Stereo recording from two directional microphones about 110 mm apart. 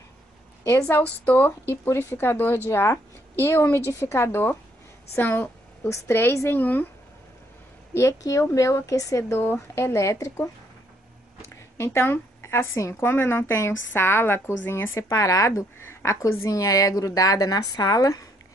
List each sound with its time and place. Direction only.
0.8 s a woman's voice: 15° left (ahead or behind)
7.9 s a woman's voice: 30° left (ahead or behind)